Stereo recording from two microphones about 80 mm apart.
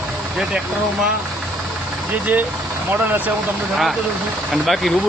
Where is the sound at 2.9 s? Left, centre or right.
Right.